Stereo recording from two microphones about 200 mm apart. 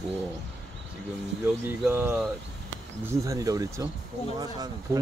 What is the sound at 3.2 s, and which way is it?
Speech, 15° right (ahead or behind).